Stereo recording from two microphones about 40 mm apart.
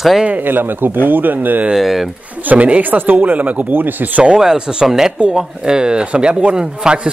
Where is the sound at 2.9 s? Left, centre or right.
Right.